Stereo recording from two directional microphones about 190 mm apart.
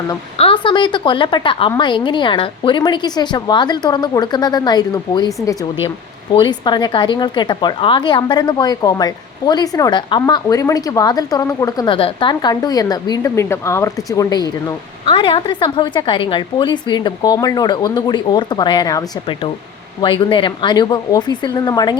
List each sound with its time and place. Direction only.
0.3 s a woman's voice: 30° left (ahead or behind)